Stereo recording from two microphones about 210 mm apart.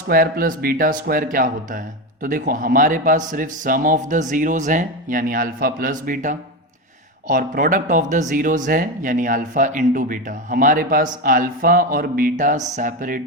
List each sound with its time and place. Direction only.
0.1 s speech: 40° right (ahead or behind)